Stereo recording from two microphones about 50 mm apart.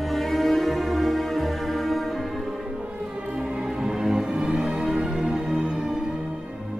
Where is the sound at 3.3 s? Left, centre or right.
Centre.